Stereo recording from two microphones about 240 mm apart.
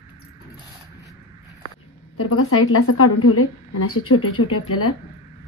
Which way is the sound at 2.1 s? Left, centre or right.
Left.